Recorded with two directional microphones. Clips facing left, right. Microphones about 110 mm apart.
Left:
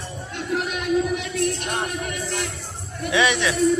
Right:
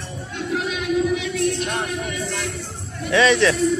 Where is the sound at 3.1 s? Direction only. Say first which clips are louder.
Right 5 dB; 15° left (ahead or behind).